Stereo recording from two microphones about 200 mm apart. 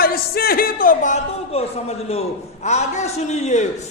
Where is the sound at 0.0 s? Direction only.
50° left (ahead or behind).